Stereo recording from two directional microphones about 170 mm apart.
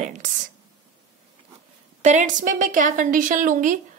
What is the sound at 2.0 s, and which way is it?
A woman's voice, 45° right (ahead or behind).